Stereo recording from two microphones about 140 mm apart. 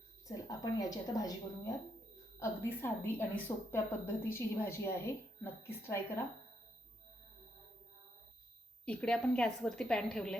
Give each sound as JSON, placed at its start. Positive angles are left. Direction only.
{"t": 0.3, "sound": "a woman's voice", "side_deg": 25}
{"t": 8.8, "sound": "a woman's voice", "side_deg": 5}